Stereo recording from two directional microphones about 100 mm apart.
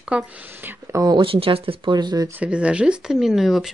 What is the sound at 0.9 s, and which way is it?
Speech, 35° right (ahead or behind).